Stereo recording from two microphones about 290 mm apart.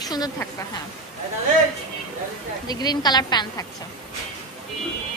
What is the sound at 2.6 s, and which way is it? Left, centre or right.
A woman's voice, centre.